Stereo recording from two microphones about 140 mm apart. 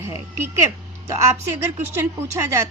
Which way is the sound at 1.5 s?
15° right (ahead or behind).